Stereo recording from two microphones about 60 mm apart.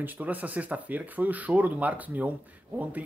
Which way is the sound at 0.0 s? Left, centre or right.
Right.